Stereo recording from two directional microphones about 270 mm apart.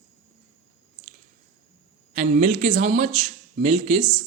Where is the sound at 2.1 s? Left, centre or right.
Right.